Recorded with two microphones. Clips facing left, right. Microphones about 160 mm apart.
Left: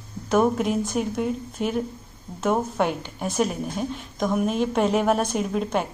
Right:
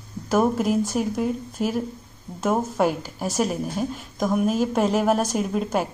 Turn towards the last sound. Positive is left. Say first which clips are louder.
# right 1 dB
turn(degrees=-5)  # may be behind; listen again after turning